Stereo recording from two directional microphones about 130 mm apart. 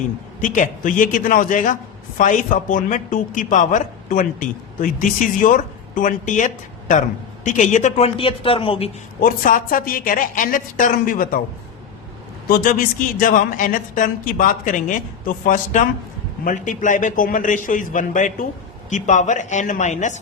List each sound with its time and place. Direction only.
0.4 s a woman's voice: 80° left; by 8.9 s 45° left (ahead or behind)
9.2 s a woman's voice: 90° left
13.1 s a woman's voice: 90° left
18.9 s speech: 70° left (ahead or behind)